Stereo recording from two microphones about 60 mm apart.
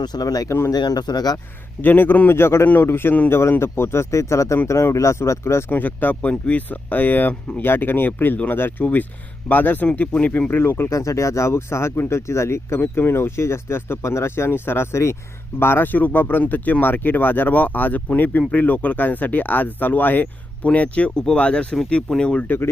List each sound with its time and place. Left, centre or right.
0.2 s speech: left
0.4 s speech: left
0.7 s speech: left
1.8 s speech: left
4.1 s speech: left
5.7 s speech: left
10.6 s speech: left; by 22.4 s centre
22.4 s speech: left